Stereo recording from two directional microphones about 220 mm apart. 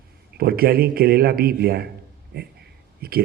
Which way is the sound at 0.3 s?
45° right (ahead or behind).